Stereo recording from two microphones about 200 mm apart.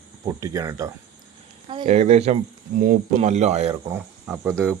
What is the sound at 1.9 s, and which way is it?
Speech, 35° right (ahead or behind).